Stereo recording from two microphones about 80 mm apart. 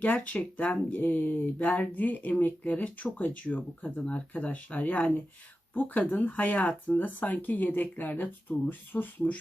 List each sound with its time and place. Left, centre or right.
0.0 s speech: left